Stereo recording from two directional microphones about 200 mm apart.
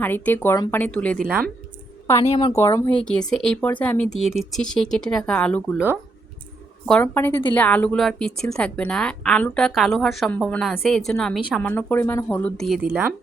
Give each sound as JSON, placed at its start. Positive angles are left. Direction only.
{"t": 0.0, "sound": "speech", "side_deg": 10}
{"t": 2.2, "sound": "speech", "side_deg": 30}
{"t": 2.5, "sound": "a woman's voice", "side_deg": 15}
{"t": 6.8, "sound": "a woman's voice", "side_deg": 5}